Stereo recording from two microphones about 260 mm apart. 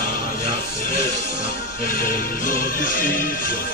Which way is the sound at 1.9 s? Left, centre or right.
Left.